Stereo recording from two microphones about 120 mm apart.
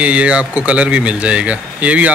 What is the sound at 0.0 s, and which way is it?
Speech, 10° right (ahead or behind).